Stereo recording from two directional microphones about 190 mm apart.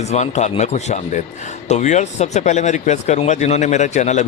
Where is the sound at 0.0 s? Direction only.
35° left (ahead or behind).